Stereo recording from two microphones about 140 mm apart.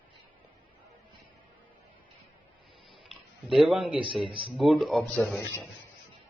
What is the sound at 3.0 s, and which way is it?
Tick-tock, centre (ahead or behind).